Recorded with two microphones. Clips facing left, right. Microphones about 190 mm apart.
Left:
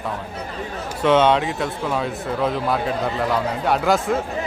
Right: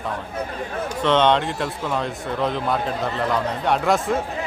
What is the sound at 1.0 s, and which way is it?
A man's voice, 5° left (ahead or behind).